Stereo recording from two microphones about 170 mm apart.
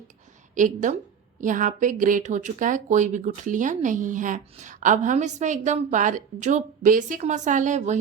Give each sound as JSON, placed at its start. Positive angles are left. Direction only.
{"t": 0.5, "sound": "speech", "side_deg": -50}